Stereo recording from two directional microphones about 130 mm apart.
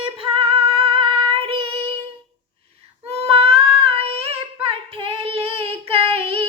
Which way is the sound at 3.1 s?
50° right (ahead or behind).